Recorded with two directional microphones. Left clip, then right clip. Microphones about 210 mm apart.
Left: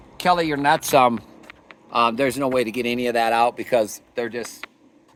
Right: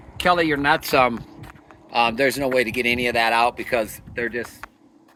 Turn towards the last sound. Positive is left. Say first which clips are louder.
# right 1 dB
turn(degrees=20)  # may be behind; listen again after turning